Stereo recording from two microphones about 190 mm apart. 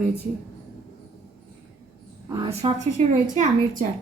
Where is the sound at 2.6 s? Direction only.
30° right (ahead or behind).